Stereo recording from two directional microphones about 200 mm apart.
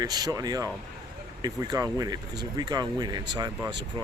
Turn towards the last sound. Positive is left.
turn(degrees=-20)  # may be behind; listen again after turning